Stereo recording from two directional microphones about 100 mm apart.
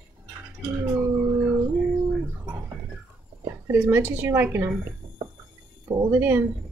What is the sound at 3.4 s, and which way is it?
A woman's voice, 25° right (ahead or behind).